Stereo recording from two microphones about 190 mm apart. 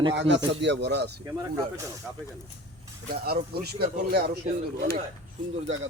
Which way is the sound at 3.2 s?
55° right (ahead or behind).